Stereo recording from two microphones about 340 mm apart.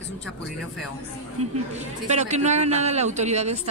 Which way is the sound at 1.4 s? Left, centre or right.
Centre.